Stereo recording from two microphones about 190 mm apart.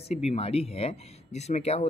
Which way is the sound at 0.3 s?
30° left (ahead or behind).